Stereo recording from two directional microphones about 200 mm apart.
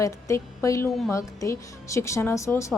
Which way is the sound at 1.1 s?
15° left (ahead or behind).